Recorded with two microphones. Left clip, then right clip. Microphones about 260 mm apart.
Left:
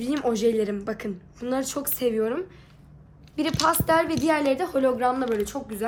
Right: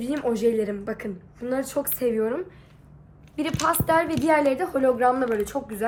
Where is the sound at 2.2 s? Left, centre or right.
Centre.